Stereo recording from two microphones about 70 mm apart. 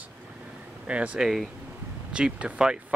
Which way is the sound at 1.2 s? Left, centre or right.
Centre.